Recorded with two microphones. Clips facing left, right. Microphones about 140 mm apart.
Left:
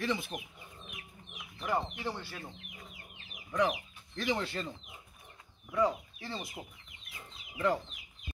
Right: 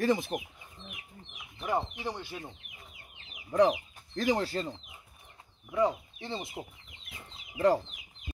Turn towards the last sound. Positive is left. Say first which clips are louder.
# right 6 dB
turn(degrees=-35)  # may be behind; listen again after turning